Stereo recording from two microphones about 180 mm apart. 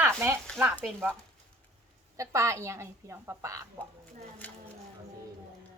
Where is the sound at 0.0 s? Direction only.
15° right (ahead or behind).